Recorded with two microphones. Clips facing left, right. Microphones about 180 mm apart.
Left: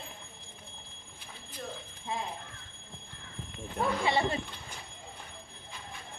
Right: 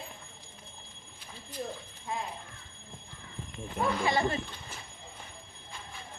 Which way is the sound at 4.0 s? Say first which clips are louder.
Even; 25° left (ahead or behind).